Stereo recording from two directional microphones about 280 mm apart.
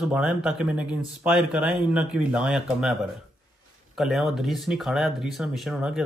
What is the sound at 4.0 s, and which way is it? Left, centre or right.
A man's voice, centre.